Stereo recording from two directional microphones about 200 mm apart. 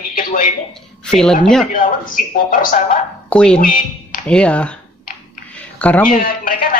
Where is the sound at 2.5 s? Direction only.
40° left (ahead or behind).